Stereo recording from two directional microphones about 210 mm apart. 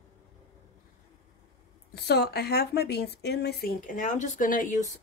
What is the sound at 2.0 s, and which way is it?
Speech, 50° left (ahead or behind).